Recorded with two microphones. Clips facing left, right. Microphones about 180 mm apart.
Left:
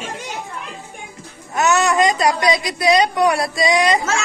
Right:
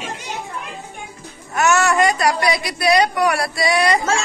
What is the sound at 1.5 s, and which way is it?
A woman's voice, 20° left (ahead or behind).